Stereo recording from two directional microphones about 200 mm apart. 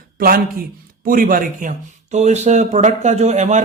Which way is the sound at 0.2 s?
45° right (ahead or behind).